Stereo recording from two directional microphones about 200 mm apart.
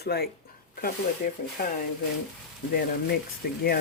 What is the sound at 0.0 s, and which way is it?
Speech, 55° left (ahead or behind).